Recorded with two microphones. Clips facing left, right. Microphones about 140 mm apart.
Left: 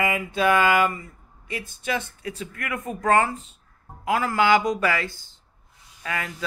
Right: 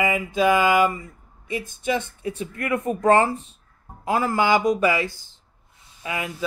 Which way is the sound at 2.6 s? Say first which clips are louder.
Right 9 dB; 30° right (ahead or behind).